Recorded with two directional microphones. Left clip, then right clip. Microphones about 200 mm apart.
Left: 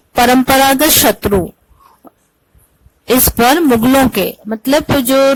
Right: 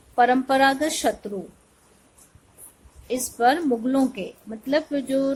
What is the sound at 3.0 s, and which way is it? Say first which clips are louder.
Speech: left 10 dB; 40° left (ahead or behind).